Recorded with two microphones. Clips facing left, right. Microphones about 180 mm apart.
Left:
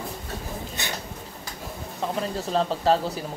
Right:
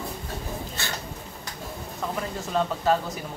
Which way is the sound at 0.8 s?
20° left (ahead or behind).